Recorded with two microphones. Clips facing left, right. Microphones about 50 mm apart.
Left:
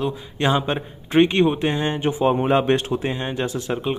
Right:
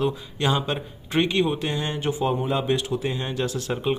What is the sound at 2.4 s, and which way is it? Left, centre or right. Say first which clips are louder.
Speech: left 6 dB; left.